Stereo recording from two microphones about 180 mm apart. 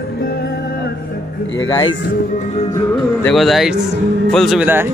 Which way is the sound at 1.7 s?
25° left (ahead or behind).